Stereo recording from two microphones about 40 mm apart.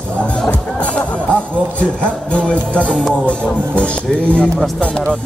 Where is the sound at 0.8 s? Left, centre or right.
Left.